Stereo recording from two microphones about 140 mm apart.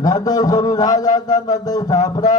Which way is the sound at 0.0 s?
25° left (ahead or behind).